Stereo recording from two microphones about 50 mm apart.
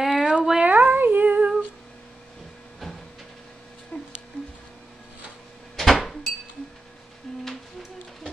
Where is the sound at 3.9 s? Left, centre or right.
Left.